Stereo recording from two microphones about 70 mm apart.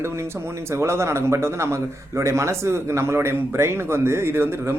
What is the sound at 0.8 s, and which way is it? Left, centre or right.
A man's voice, right.